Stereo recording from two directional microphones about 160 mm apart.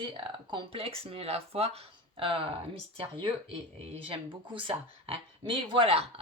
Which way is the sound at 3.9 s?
30° right (ahead or behind).